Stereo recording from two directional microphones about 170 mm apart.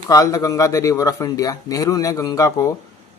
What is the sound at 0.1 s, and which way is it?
Speech, 20° left (ahead or behind).